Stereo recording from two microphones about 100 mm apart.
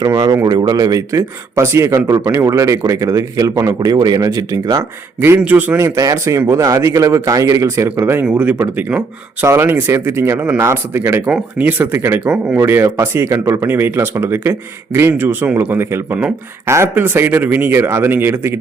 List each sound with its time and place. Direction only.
0.1 s a man's voice: 35° right (ahead or behind)
5.4 s speech: 15° right (ahead or behind)
6.0 s a man's voice: 30° right (ahead or behind)
8.2 s speech: 15° right (ahead or behind)
9.5 s speech: 25° right (ahead or behind)
12.2 s speech: 10° right (ahead or behind)
12.5 s speech: 25° right (ahead or behind)